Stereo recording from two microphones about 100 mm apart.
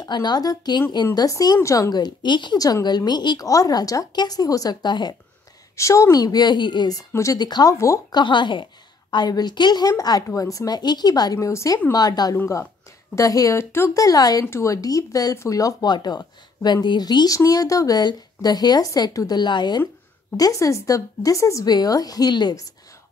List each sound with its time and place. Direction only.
0.0 s speech: 45° left (ahead or behind)
3.4 s speech: 35° left (ahead or behind)
5.8 s speech: 30° left (ahead or behind)
7.1 s speech: 30° left (ahead or behind)
7.3 s speech: 45° left (ahead or behind)
7.7 s speech: 30° left (ahead or behind)
8.1 s speech: 50° left (ahead or behind)
14.4 s speech: 30° left (ahead or behind); by 19.8 s 45° left (ahead or behind)
20.3 s speech: 35° left (ahead or behind)